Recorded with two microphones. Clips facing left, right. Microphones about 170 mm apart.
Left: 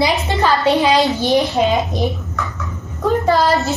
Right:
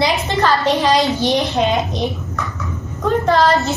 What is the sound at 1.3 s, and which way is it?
Speech, centre (ahead or behind).